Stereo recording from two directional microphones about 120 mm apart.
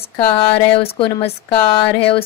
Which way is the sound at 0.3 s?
50° left (ahead or behind).